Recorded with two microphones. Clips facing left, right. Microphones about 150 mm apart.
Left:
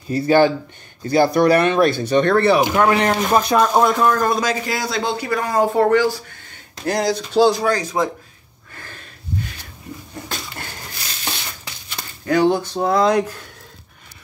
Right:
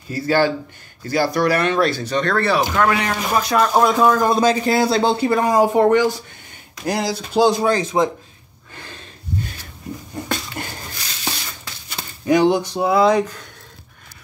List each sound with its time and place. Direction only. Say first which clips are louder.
0.1 s speech: left 3 dB; 20° left (ahead or behind)
3.0 s speech: left 4 dB; 35° left (ahead or behind)
3.5 s speech: right 2 dB; centre (ahead or behind)
4.3 s speech: right 4 dB; 30° right (ahead or behind)
5.5 s speech: even; 15° right (ahead or behind)
6.9 s speech: left 2 dB; 5° right (ahead or behind)
7.3 s speech: even; 20° right (ahead or behind)
8.7 s snort: right 1 dB; 20° right (ahead or behind)
10.6 s a sound: right 4 dB; 20° right (ahead or behind)
12.3 s speech: right 1 dB; 15° right (ahead or behind); by 13.5 s 5° left (ahead or behind)